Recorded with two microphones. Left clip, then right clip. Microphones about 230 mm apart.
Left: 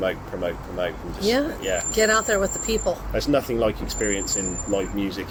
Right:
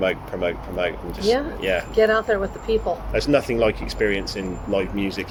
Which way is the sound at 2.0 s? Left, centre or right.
Left.